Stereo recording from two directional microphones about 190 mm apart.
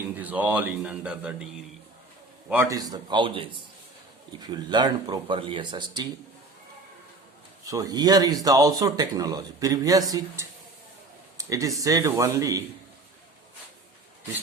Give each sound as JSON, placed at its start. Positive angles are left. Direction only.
{"t": 0.2, "sound": "a man's voice", "side_deg": -10}
{"t": 2.5, "sound": "speech", "side_deg": -15}
{"t": 7.6, "sound": "speech", "side_deg": -20}
{"t": 11.3, "sound": "a sound", "side_deg": -15}
{"t": 11.8, "sound": "a man's voice", "side_deg": -15}